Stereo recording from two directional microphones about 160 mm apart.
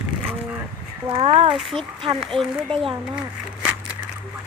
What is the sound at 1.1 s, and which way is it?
Speech, 35° right (ahead or behind).